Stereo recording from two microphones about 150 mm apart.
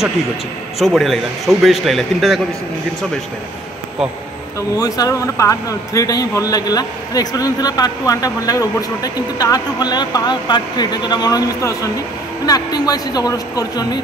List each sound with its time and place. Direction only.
0.7 s a man's voice: centre (ahead or behind)
4.6 s a man's voice: 25° left (ahead or behind)